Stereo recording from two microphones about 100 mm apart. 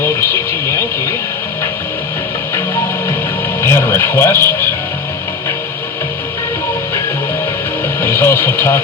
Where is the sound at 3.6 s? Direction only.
25° left (ahead or behind).